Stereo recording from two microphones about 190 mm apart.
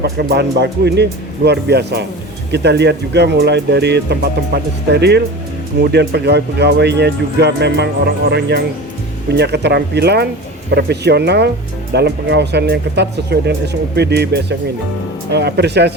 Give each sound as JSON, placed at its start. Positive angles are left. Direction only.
{"t": 0.0, "sound": "speech", "side_deg": -55}